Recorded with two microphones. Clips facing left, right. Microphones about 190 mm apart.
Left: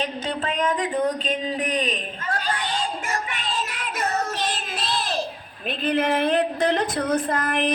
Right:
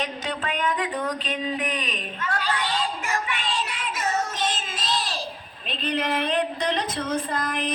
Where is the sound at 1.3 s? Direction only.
35° left (ahead or behind).